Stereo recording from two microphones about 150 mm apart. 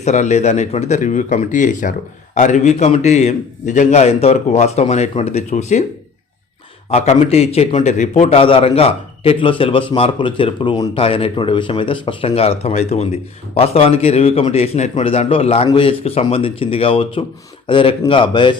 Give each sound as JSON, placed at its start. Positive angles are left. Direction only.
{"t": 0.0, "sound": "a man's voice", "side_deg": 50}
{"t": 6.9, "sound": "a man's voice", "side_deg": 45}